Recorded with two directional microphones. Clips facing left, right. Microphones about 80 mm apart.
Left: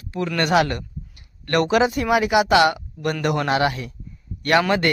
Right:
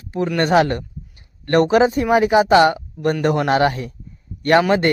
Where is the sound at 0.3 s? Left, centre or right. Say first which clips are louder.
Right 3 dB; right.